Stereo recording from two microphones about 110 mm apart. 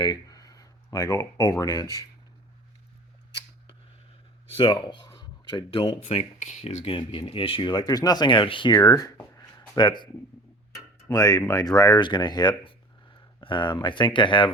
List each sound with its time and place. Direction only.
0.0 s speech: 35° left (ahead or behind)
4.5 s speech: 45° left (ahead or behind)
6.0 s speech: 70° left (ahead or behind); by 6.9 s 90° left
6.9 s speech: 55° left (ahead or behind)
8.7 s speech: 35° left (ahead or behind)
9.1 s a sound: 30° left (ahead or behind)
11.1 s speech: 35° left (ahead or behind)